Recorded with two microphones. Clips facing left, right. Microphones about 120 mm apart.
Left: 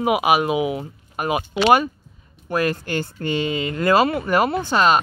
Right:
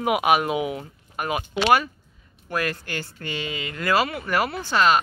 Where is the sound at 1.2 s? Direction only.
20° left (ahead or behind).